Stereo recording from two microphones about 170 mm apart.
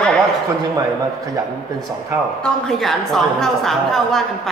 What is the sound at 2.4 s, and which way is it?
A woman's voice, centre (ahead or behind).